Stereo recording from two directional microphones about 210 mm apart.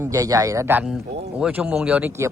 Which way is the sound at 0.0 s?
15° right (ahead or behind).